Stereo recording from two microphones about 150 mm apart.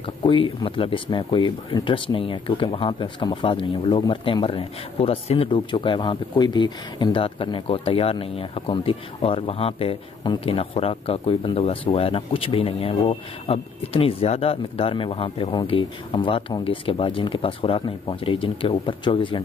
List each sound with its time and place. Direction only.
0.2 s speech: 30° left (ahead or behind)